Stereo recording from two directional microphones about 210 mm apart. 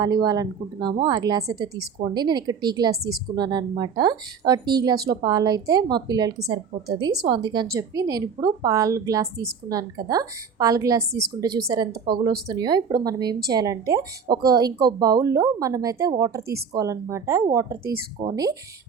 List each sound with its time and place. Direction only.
0.0 s a woman's voice: 20° right (ahead or behind)